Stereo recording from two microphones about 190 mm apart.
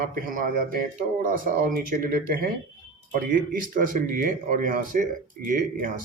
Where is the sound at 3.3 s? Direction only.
45° right (ahead or behind).